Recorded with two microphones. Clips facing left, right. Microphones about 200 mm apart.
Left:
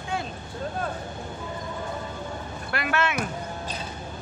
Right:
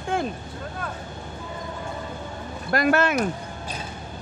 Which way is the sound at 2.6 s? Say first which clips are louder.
Right 7 dB; 40° right (ahead or behind).